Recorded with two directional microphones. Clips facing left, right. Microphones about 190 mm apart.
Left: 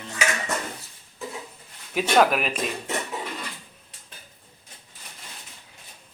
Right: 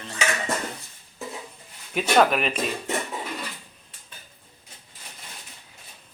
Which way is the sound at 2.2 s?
5° left (ahead or behind).